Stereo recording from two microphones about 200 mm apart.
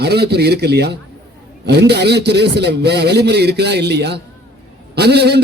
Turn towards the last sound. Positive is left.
turn(degrees=-55)  # may be behind; listen again after turning